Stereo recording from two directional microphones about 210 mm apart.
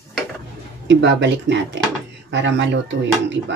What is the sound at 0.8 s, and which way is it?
Speech, 55° right (ahead or behind).